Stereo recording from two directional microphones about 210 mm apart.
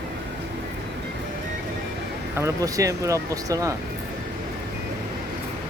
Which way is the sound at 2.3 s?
15° right (ahead or behind).